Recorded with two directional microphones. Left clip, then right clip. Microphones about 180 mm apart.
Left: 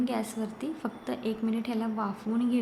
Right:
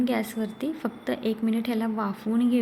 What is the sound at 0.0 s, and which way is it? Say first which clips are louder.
A woman's voice: right 4 dB; 15° right (ahead or behind).